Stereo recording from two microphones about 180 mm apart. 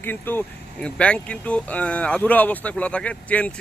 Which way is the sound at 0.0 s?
10° left (ahead or behind).